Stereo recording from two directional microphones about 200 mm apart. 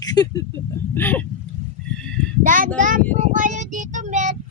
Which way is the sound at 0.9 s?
10° left (ahead or behind).